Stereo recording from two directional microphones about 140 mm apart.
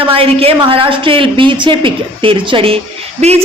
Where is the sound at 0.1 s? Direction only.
45° right (ahead or behind).